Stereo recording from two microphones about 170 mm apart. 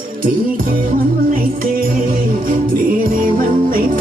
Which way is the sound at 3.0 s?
55° right (ahead or behind).